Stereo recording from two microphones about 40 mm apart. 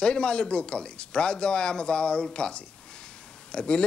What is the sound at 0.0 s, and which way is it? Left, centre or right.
Speech, left.